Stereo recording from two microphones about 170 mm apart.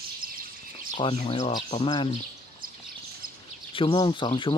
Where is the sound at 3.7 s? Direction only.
30° left (ahead or behind).